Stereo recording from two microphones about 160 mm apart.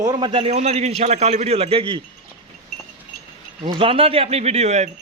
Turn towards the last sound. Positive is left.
turn(degrees=-45)  # may be behind; listen again after turning